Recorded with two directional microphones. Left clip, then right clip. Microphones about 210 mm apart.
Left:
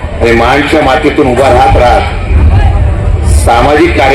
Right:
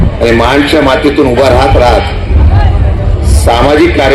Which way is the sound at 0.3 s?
40° right (ahead or behind).